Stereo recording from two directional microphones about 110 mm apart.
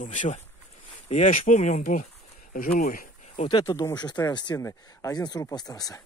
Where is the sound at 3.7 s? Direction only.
30° left (ahead or behind).